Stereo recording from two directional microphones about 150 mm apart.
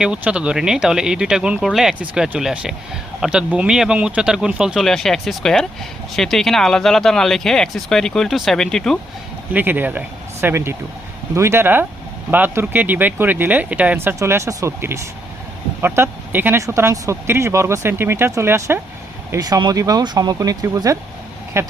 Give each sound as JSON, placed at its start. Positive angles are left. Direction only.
{"t": 0.0, "sound": "speech", "side_deg": -5}
{"t": 9.5, "sound": "speech", "side_deg": -10}